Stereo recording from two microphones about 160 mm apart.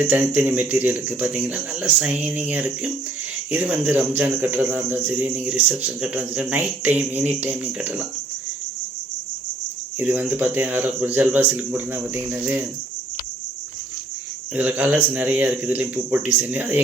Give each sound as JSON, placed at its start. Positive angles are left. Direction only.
{"t": 0.0, "sound": "speech", "side_deg": -10}
{"t": 10.0, "sound": "speech", "side_deg": -10}
{"t": 14.5, "sound": "speech", "side_deg": -10}